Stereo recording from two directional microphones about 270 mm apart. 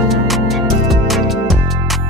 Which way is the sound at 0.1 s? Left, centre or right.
Centre.